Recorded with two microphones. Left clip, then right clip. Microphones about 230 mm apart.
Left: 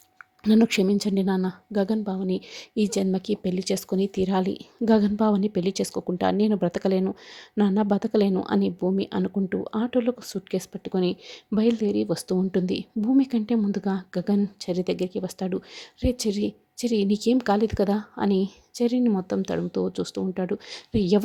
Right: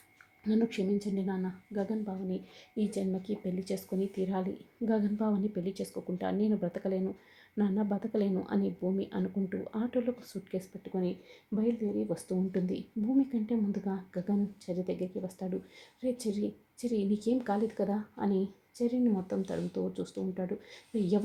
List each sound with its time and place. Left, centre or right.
0.4 s a woman's voice: left